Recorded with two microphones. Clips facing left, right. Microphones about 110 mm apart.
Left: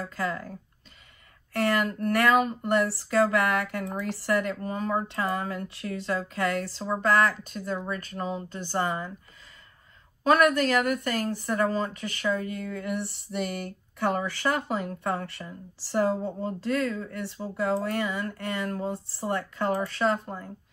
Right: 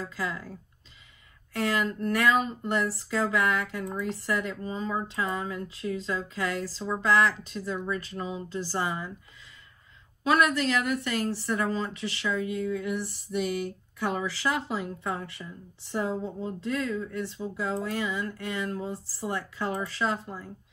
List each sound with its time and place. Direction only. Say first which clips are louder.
0.1 s a woman's voice: left 3 dB; 55° left (ahead or behind)
1.5 s a woman's voice: left 2 dB; 60° left (ahead or behind)
10.2 s a woman's voice: left 3 dB; 50° left (ahead or behind)